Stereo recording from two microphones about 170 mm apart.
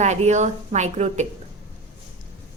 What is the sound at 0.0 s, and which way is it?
A woman's voice, 40° right (ahead or behind).